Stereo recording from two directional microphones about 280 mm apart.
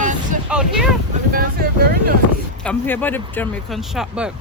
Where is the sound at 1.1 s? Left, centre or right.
Right.